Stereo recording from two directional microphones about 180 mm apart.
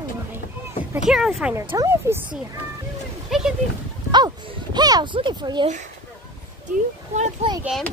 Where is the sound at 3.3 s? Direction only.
Centre (ahead or behind).